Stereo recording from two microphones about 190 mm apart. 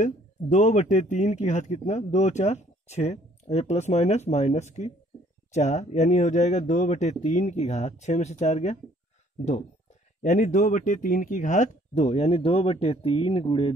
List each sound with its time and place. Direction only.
0.0 s speech: 40° left (ahead or behind)